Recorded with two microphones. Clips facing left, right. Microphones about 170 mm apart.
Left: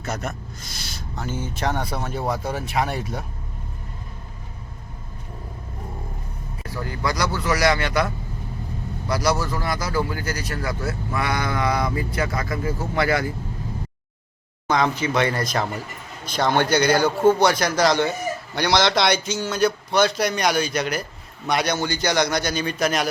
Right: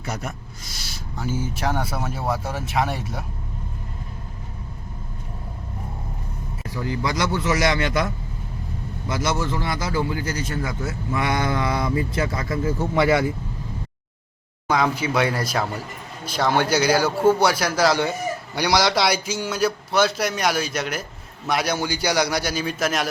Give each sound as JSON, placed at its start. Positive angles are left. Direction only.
{"t": 0.0, "sound": "a man's voice", "side_deg": -10}
{"t": 6.8, "sound": "a man's voice", "side_deg": -20}
{"t": 9.0, "sound": "a man's voice", "side_deg": -20}
{"t": 12.9, "sound": "a man's voice", "side_deg": -5}
{"t": 14.7, "sound": "a man's voice", "side_deg": -10}